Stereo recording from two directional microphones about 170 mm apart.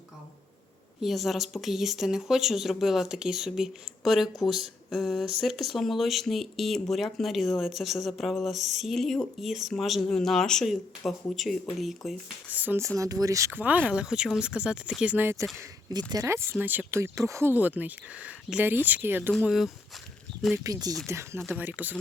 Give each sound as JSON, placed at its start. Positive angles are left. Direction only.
{"t": 1.0, "sound": "speech", "side_deg": 0}
{"t": 19.3, "sound": "speech", "side_deg": 0}
{"t": 20.7, "sound": "speech", "side_deg": -20}